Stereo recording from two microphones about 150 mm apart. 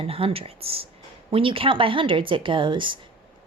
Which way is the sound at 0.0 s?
40° right (ahead or behind).